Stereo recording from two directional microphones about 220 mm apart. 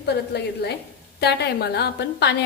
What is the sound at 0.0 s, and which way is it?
A woman's voice, 50° left (ahead or behind).